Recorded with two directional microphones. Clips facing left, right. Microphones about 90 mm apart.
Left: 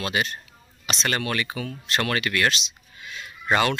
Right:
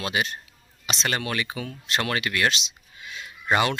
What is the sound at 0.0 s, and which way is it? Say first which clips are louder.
Speech: left 1 dB; 15° right (ahead or behind).